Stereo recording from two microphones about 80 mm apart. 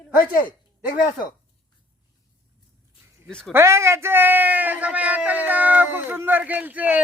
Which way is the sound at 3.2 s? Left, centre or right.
Centre.